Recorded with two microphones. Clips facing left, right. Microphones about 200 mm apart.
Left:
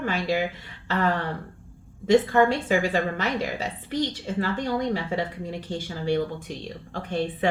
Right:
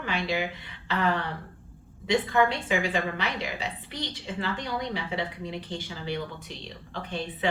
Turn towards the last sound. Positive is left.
turn(degrees=50)  # may be behind; listen again after turning